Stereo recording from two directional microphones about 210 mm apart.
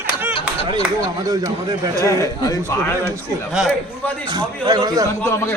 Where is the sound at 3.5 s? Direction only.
Centre (ahead or behind).